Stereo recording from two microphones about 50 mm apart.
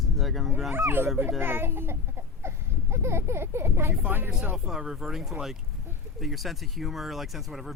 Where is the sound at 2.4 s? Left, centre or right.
Right.